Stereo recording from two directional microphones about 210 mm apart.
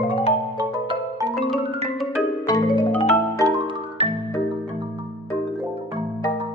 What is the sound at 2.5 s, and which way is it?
Music, 25° left (ahead or behind).